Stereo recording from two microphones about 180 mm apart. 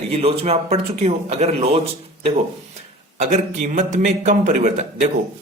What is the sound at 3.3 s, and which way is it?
Speech, 40° right (ahead or behind).